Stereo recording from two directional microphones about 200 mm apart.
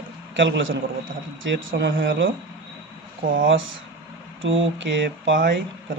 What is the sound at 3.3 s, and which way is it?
A man's voice, 75° right (ahead or behind).